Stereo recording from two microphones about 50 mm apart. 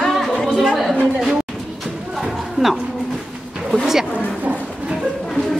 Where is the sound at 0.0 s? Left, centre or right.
Centre.